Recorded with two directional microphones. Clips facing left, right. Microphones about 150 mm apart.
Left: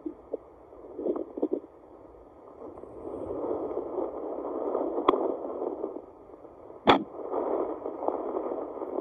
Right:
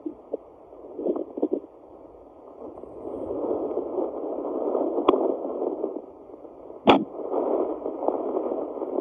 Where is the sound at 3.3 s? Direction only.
10° right (ahead or behind).